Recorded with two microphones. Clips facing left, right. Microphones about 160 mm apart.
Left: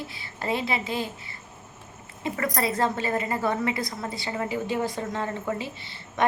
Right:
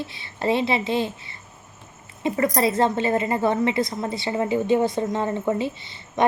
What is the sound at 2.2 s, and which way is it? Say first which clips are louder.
A woman's voice: right 6 dB; 25° right (ahead or behind).